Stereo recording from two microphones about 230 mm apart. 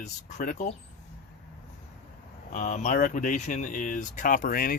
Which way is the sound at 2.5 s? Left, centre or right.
Left.